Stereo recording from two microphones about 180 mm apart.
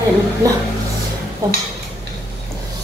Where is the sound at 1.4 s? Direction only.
20° right (ahead or behind).